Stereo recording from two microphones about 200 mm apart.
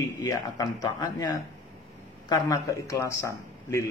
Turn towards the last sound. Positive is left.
turn(degrees=15)  # may be behind; listen again after turning